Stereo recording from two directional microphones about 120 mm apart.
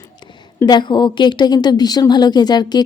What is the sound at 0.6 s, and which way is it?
A woman's voice, 40° left (ahead or behind).